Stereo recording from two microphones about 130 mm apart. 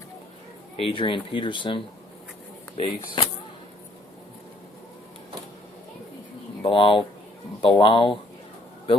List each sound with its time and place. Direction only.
0.8 s speech: 45° left (ahead or behind)
6.6 s speech: 45° left (ahead or behind)